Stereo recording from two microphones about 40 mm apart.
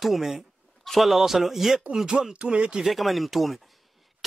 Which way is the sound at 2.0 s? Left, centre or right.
Centre.